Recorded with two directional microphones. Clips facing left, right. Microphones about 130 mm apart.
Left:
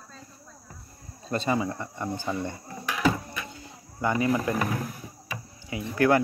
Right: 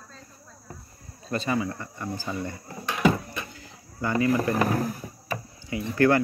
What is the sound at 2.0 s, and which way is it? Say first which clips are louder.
Speech: left 2 dB; 25° left (ahead or behind).